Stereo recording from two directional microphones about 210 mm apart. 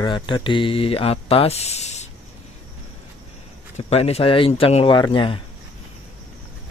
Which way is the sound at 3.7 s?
30° left (ahead or behind).